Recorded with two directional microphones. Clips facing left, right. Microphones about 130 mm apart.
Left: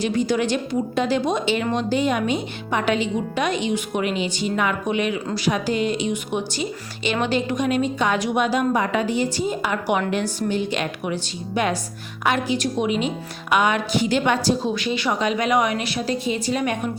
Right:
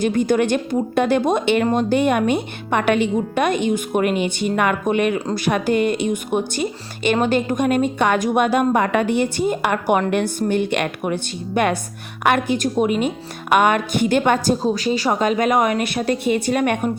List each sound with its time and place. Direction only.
0.0 s a woman's voice: 50° right (ahead or behind)